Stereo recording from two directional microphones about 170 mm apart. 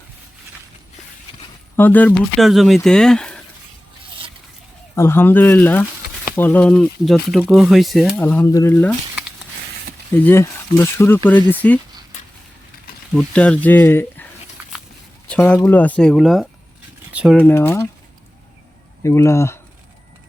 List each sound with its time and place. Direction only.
1.7 s speech: 10° left (ahead or behind)
4.9 s speech: 15° left (ahead or behind)
8.2 s speech: 10° left (ahead or behind)
10.2 s speech: 15° left (ahead or behind)
13.3 s speech: 5° left (ahead or behind)
15.3 s speech: 5° left (ahead or behind)
17.4 s speech: 10° left (ahead or behind)
19.0 s speech: 15° left (ahead or behind)